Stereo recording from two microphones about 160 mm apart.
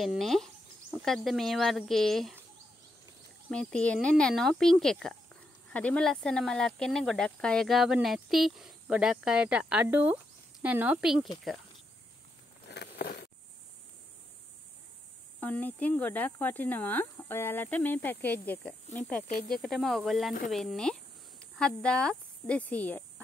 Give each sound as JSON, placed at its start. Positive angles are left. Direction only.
{"t": 0.0, "sound": "speech", "side_deg": 0}
{"t": 3.4, "sound": "speech", "side_deg": 5}
{"t": 12.6, "sound": "a sound", "side_deg": 90}
{"t": 15.4, "sound": "speech", "side_deg": 10}